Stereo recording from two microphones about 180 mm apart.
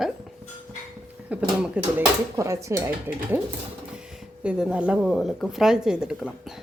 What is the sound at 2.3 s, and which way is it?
Speech, 15° right (ahead or behind).